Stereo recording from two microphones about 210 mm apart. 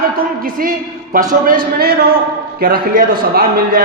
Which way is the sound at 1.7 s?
50° right (ahead or behind).